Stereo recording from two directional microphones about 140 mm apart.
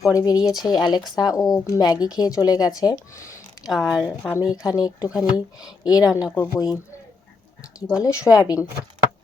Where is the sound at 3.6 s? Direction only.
5° right (ahead or behind).